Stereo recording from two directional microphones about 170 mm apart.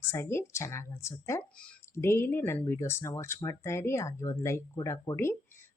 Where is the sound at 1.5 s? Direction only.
5° left (ahead or behind).